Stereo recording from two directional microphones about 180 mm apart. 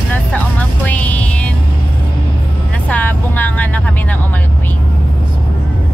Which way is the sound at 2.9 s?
10° left (ahead or behind).